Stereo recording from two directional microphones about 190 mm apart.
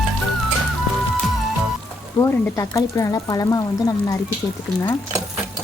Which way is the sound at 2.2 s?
15° left (ahead or behind).